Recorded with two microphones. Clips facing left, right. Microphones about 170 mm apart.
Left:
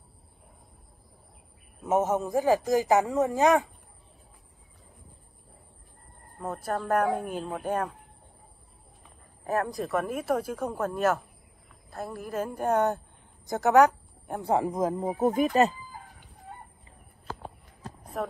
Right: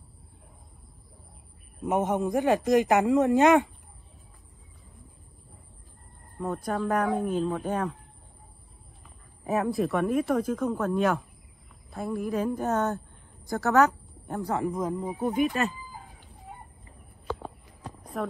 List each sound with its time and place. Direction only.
2.0 s speech: centre (ahead or behind)
6.4 s speech: 5° left (ahead or behind)
9.5 s speech: centre (ahead or behind)
14.4 s speech: 25° left (ahead or behind)
15.0 s speech: 45° left (ahead or behind)
18.0 s a sound: centre (ahead or behind)